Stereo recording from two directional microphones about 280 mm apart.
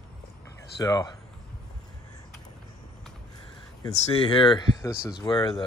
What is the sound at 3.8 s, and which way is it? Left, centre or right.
Speech, centre.